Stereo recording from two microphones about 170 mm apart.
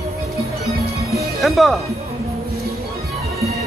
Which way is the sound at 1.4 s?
Centre (ahead or behind).